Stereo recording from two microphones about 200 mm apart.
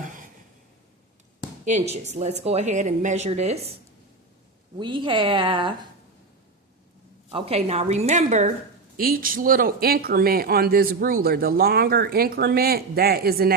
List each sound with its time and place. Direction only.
0.0 s a sound: 40° right (ahead or behind)
1.6 s speech: 35° right (ahead or behind)
4.8 s a woman's voice: 25° right (ahead or behind)
7.3 s speech: 30° right (ahead or behind)
9.0 s speech: 45° right (ahead or behind)